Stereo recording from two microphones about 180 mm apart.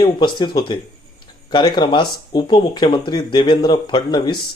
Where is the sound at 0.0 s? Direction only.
25° left (ahead or behind).